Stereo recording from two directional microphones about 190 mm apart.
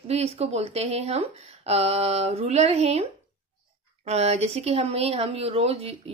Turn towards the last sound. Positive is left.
turn(degrees=-35)  # may be behind; listen again after turning